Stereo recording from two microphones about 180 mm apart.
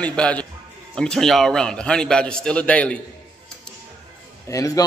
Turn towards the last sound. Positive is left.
turn(degrees=20)  # may be behind; listen again after turning